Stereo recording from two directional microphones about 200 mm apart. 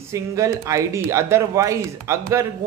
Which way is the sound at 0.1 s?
15° right (ahead or behind).